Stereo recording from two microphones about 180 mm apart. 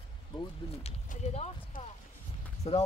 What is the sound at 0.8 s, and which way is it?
Speech, 40° left (ahead or behind).